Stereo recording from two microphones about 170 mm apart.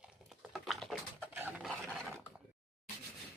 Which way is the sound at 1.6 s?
Centre (ahead or behind).